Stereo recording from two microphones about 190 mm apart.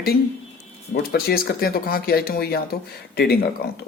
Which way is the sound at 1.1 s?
55° left (ahead or behind).